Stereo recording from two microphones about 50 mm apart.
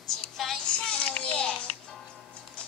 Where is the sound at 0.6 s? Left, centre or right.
Left.